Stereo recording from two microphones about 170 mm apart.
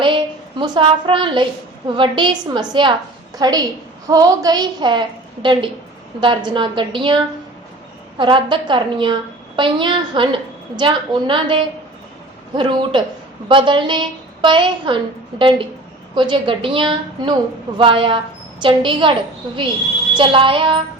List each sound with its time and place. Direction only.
0.0 s a sound: 25° right (ahead or behind)
2.0 s a woman's voice: 30° right (ahead or behind)
8.2 s a woman's voice: 30° right (ahead or behind)
20.1 s a woman's voice: 30° right (ahead or behind)